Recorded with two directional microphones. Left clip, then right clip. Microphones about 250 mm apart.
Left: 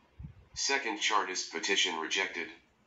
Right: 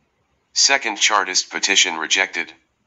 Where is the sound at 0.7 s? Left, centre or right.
Right.